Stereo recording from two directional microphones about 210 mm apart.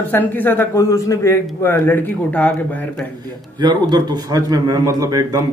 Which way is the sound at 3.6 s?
20° right (ahead or behind).